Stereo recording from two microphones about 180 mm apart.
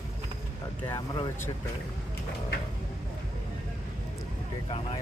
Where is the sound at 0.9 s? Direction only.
20° left (ahead or behind).